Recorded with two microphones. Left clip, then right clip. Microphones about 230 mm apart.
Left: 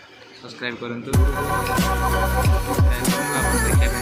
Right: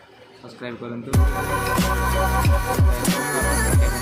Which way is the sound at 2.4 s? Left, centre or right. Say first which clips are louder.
Right 1 dB; centre.